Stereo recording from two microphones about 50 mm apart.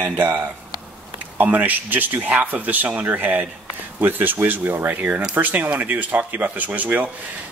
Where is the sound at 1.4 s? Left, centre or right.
Right.